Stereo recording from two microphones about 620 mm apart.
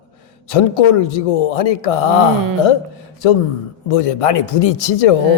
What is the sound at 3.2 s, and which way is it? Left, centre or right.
Speech, left.